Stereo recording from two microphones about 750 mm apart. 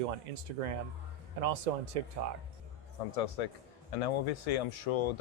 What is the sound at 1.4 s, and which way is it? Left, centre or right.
Speech, right.